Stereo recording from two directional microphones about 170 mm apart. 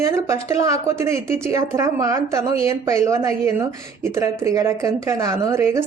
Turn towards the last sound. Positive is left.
turn(degrees=-15)  # may be behind; listen again after turning